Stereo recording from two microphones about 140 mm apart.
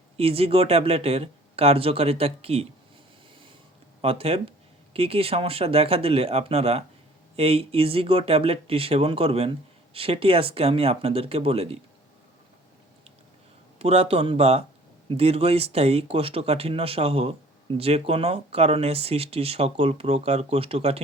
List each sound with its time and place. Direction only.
0.2 s speech: 45° right (ahead or behind)
4.0 s speech: 45° right (ahead or behind)
13.7 s speech: 45° right (ahead or behind)